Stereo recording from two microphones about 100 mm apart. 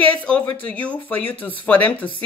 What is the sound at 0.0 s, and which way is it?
Speech, 15° left (ahead or behind).